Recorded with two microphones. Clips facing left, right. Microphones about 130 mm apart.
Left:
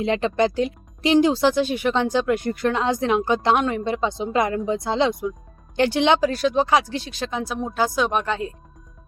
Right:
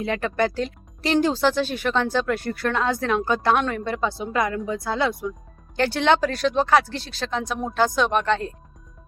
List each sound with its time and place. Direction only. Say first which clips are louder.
0.0 s speech: left 3 dB; 20° left (ahead or behind)